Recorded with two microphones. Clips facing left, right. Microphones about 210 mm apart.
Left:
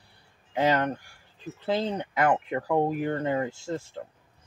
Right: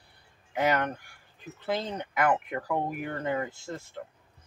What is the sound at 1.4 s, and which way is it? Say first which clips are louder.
Speech: left 4 dB; 30° left (ahead or behind).